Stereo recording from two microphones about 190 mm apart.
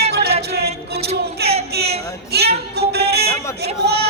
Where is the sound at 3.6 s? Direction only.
60° right (ahead or behind).